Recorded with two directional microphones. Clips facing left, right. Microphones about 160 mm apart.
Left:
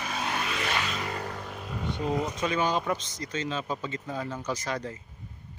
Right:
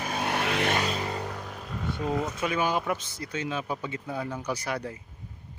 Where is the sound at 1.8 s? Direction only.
15° left (ahead or behind).